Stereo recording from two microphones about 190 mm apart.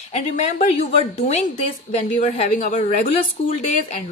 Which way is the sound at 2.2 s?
35° left (ahead or behind).